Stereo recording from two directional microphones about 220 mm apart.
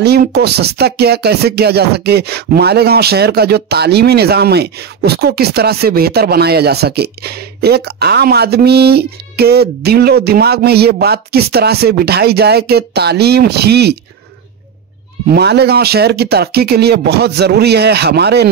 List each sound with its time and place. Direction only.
0.0 s speech: 45° right (ahead or behind)
15.3 s speech: 50° right (ahead or behind)